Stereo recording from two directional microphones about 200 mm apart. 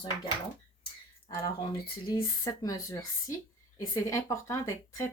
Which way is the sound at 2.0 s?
20° left (ahead or behind).